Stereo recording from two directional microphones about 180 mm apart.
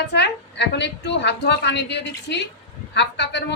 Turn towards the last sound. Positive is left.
turn(degrees=75)  # may be behind; listen again after turning